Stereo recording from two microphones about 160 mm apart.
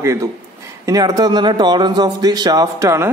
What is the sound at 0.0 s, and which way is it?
A man's voice, 20° right (ahead or behind).